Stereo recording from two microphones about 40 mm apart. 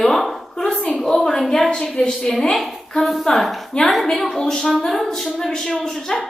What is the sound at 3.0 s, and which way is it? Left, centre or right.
A woman's voice, centre.